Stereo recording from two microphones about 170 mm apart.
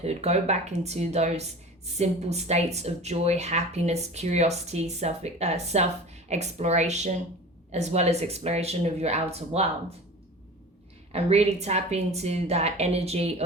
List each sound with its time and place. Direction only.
0.0 s speech: 40° right (ahead or behind)
11.1 s speech: 40° right (ahead or behind)